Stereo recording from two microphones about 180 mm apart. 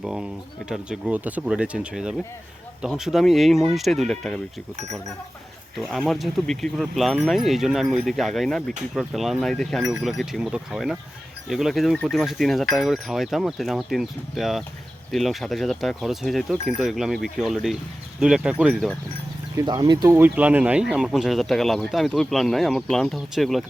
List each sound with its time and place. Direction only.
0.0 s speech: 5° right (ahead or behind)
5.8 s speech: centre (ahead or behind)
19.5 s speech: 20° right (ahead or behind)
20.1 s speech: 10° right (ahead or behind)